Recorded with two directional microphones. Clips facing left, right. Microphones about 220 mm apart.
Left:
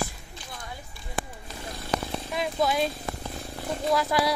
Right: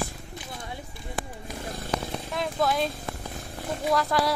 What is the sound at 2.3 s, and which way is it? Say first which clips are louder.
Speech: even; 5° left (ahead or behind).